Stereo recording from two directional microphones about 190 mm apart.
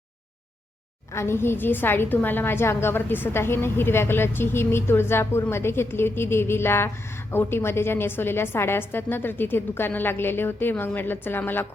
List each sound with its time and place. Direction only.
1.1 s a woman's voice: 15° left (ahead or behind)